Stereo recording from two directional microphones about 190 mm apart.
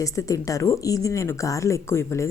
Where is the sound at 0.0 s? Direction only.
15° left (ahead or behind).